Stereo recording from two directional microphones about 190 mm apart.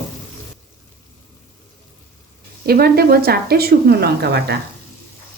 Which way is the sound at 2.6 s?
55° right (ahead or behind).